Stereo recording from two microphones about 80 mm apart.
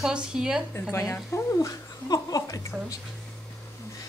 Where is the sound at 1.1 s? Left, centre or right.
Left.